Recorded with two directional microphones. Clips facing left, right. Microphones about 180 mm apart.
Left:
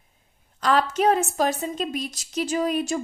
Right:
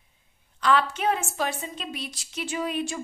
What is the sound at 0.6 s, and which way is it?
A woman's voice, 40° left (ahead or behind).